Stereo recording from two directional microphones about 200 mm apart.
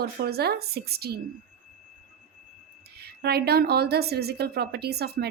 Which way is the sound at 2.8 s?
50° right (ahead or behind).